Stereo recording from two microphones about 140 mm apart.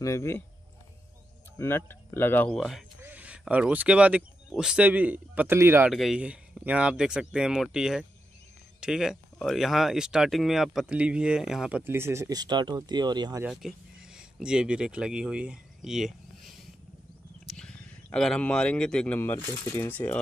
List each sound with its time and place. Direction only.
0.0 s speech: 20° left (ahead or behind)
1.6 s speech: 20° left (ahead or behind)
2.5 s speech: centre (ahead or behind); by 5.9 s 15° right (ahead or behind)
5.9 s speech: 5° right (ahead or behind); by 13.4 s 30° right (ahead or behind)
13.5 s speech: 5° right (ahead or behind)